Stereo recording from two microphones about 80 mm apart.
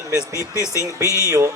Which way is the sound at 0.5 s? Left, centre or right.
Left.